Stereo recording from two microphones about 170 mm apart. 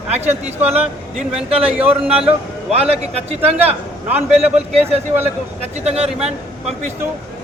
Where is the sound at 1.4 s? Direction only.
35° right (ahead or behind).